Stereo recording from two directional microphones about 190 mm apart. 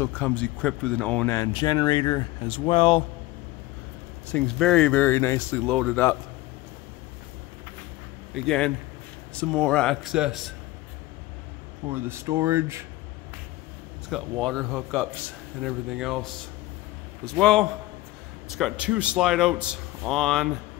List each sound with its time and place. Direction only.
0.0 s speech: 10° left (ahead or behind)
1.3 s speech: 20° left (ahead or behind)
4.3 s speech: 5° left (ahead or behind)
8.4 s speech: 5° left (ahead or behind)
11.9 s speech: 15° right (ahead or behind)
14.0 s speech: centre (ahead or behind)